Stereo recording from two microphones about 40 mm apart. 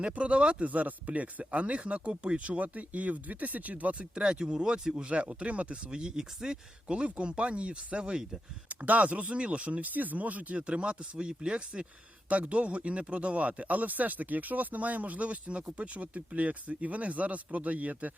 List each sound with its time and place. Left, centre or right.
0.0 s speech: right
4.1 s speech: right
5.0 s speech: right
6.9 s speech: right
8.7 s speech: right
9.9 s speech: right
10.6 s speech: right
12.3 s speech: right